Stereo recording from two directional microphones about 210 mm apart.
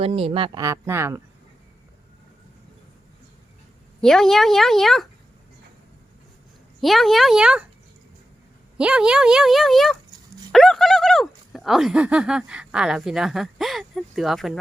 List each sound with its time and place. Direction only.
0.0 s speech: 25° right (ahead or behind); by 1.2 s 10° right (ahead or behind)
4.0 s speech: centre (ahead or behind)
6.8 s speech: centre (ahead or behind)
8.8 s speech: 5° right (ahead or behind)